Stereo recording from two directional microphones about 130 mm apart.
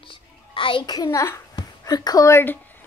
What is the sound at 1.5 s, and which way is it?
A woman's voice, 30° left (ahead or behind).